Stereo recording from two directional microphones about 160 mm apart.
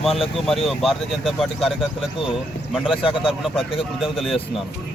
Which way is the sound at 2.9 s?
35° left (ahead or behind).